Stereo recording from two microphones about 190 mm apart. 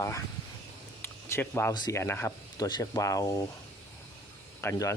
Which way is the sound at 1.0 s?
10° left (ahead or behind).